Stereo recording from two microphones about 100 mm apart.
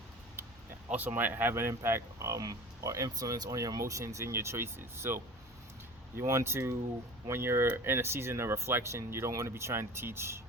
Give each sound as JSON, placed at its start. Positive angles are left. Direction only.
{"t": 0.9, "sound": "speech", "side_deg": -20}